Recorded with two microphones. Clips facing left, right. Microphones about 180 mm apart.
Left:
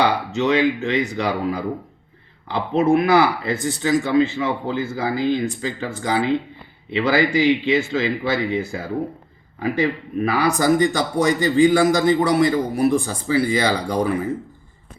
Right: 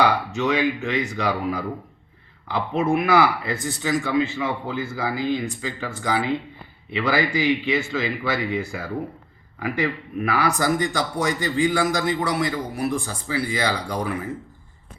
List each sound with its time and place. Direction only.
0.0 s a man's voice: 20° left (ahead or behind)